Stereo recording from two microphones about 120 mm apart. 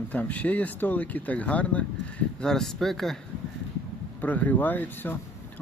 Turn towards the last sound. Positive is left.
turn(degrees=15)  # may be behind; listen again after turning